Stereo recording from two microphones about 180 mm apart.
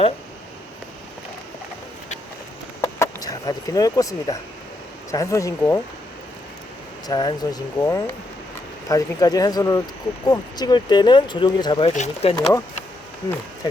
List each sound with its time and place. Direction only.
2.8 s a sound: 20° left (ahead or behind)
5.1 s speech: 15° left (ahead or behind)
7.1 s speech: 20° left (ahead or behind)